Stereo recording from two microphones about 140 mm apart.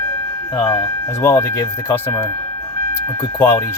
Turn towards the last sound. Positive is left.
turn(degrees=10)  # may be behind; listen again after turning